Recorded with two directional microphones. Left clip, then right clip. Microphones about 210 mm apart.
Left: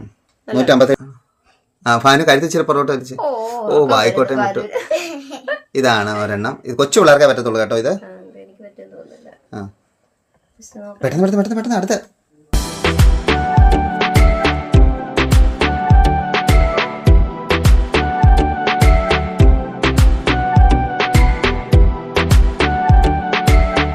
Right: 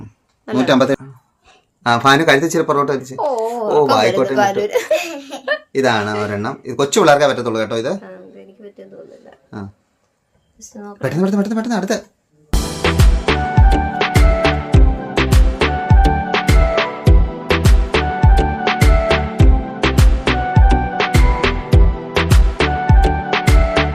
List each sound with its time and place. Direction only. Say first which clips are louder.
0.5 s speech: left 2 dB; 10° left (ahead or behind)
3.2 s speech: right 2 dB; 25° right (ahead or behind)
3.7 s speech: left 1 dB; 15° left (ahead or behind)
4.9 s laughter: right 2 dB; 20° right (ahead or behind)
5.7 s speech: left 2 dB; 15° left (ahead or behind)
8.6 s a sound: right 3 dB; 30° right (ahead or behind)
11.0 s speech: left 2 dB; centre (ahead or behind)
12.5 s music: even; centre (ahead or behind)